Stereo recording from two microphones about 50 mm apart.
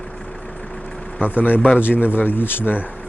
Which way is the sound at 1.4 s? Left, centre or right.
Left.